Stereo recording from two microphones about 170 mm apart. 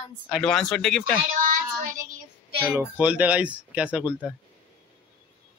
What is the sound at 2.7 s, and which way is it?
Speech, 10° right (ahead or behind).